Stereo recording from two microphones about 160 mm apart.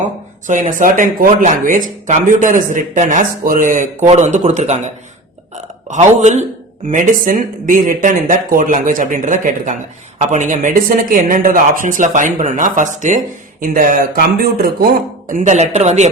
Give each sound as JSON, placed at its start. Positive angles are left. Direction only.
{"t": 0.8, "sound": "speech", "side_deg": -60}
{"t": 15.3, "sound": "speech", "side_deg": -50}